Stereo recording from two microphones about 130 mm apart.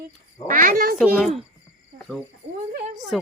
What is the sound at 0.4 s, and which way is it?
Speech, 90° right.